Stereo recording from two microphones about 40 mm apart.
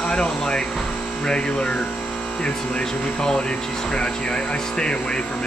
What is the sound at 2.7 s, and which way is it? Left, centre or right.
Speech, left.